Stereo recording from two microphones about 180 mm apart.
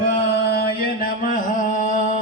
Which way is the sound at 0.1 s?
60° left (ahead or behind).